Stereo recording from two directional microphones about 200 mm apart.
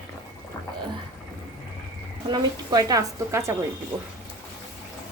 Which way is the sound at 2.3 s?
20° right (ahead or behind).